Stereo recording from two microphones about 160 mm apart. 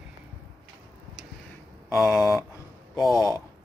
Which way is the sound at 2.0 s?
Centre (ahead or behind).